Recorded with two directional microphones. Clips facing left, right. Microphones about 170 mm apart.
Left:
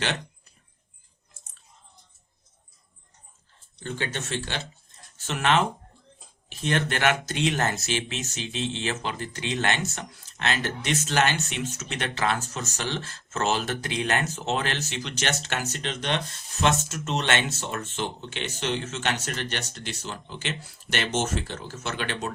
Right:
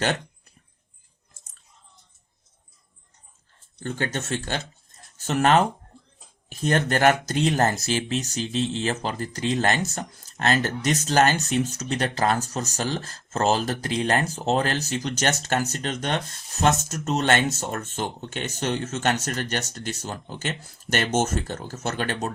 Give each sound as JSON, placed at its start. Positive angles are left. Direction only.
{"t": 3.8, "sound": "speech", "side_deg": -45}